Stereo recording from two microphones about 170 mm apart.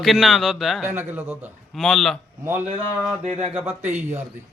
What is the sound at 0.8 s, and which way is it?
Speech, 10° right (ahead or behind).